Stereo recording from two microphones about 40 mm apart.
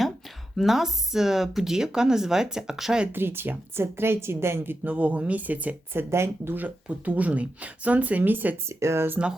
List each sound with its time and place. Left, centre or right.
0.5 s speech: centre
3.1 s speech: right
3.8 s a woman's voice: right
4.8 s speech: right
5.9 s speech: right
6.7 s speech: right